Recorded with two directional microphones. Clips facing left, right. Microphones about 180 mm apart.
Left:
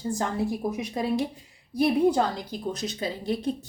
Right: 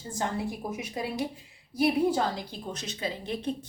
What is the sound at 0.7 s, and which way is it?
Speech, 35° left (ahead or behind).